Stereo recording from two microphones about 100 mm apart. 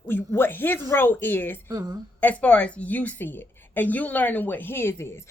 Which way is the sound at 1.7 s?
40° right (ahead or behind).